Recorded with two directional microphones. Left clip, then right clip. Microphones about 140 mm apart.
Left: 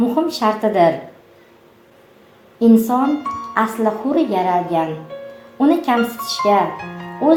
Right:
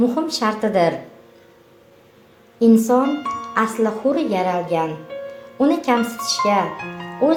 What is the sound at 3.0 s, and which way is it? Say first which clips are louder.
Speech: left 3 dB; centre (ahead or behind).